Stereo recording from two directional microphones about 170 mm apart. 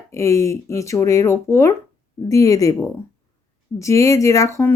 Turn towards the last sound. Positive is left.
turn(degrees=15)  # may be behind; listen again after turning